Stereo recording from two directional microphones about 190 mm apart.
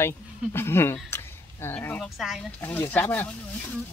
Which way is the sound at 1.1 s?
10° left (ahead or behind).